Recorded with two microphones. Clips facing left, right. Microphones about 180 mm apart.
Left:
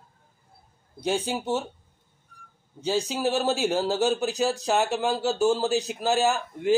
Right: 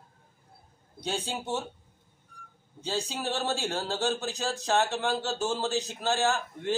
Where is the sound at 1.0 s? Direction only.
10° left (ahead or behind).